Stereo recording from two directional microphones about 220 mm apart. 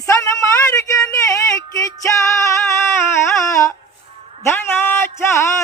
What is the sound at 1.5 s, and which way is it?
Female singing, 15° left (ahead or behind).